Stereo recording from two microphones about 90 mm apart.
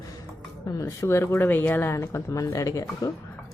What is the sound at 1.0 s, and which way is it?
Speech, 30° left (ahead or behind).